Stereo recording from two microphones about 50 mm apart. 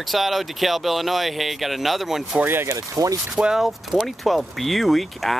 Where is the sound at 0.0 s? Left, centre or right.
Centre.